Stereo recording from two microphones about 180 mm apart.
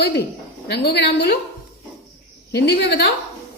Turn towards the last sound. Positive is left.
turn(degrees=75)  # may be behind; listen again after turning